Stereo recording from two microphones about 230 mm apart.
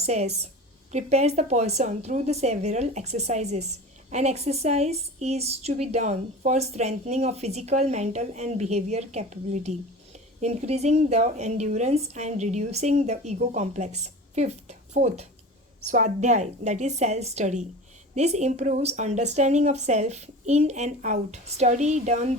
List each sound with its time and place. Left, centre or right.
0.0 s a woman's voice: right